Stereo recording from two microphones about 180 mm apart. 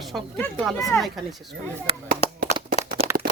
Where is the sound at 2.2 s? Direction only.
35° left (ahead or behind).